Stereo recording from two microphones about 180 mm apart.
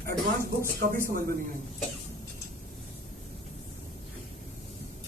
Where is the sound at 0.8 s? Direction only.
50° right (ahead or behind).